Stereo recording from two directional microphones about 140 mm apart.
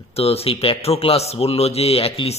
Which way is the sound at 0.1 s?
45° left (ahead or behind).